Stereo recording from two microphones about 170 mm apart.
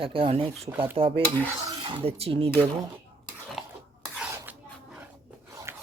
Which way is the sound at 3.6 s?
Centre (ahead or behind).